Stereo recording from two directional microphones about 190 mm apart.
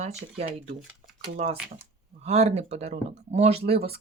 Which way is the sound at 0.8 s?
Centre (ahead or behind).